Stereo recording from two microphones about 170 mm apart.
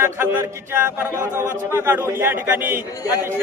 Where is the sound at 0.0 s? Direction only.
15° right (ahead or behind).